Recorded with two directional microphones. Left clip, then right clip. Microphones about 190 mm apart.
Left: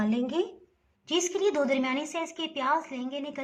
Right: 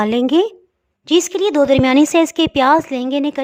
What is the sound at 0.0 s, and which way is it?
A woman's voice, 60° right (ahead or behind).